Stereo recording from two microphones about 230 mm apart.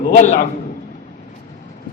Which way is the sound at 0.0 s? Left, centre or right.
Left.